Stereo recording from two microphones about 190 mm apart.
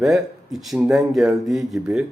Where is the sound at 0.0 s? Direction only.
Centre (ahead or behind).